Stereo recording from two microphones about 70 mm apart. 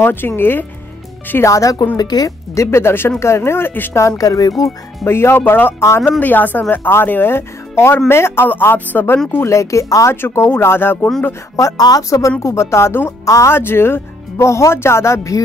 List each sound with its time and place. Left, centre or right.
0.0 s speech: left
1.4 s speech: left
2.0 s a woman's voice: left
2.5 s speech: left
3.9 s speech: left
5.0 s speech: left
8.5 s speech: left
9.3 s speech: left
10.2 s speech: left
11.5 s speech: left